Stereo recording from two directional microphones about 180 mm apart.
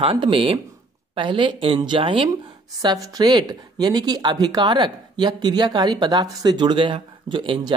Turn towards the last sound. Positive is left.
turn(degrees=-25)  # may be behind; listen again after turning